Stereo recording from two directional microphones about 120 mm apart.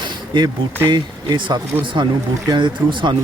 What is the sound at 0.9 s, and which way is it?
Speech, 35° right (ahead or behind).